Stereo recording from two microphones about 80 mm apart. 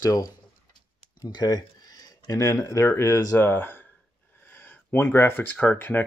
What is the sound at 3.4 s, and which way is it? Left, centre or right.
Speech, left.